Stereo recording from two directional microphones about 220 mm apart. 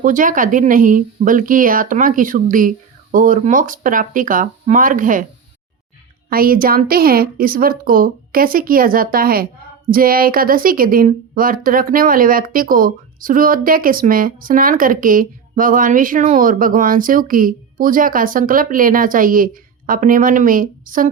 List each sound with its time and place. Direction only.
0.0 s a woman's voice: 35° right (ahead or behind)
6.3 s a woman's voice: 40° right (ahead or behind)